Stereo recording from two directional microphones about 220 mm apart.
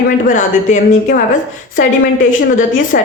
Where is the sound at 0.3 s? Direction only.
35° left (ahead or behind).